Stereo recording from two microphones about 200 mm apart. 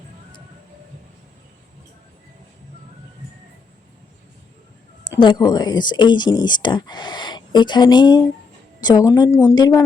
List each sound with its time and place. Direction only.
5.2 s speech: 20° left (ahead or behind)